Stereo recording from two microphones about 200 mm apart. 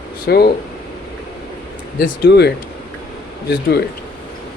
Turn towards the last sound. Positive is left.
turn(degrees=55)  # may be behind; listen again after turning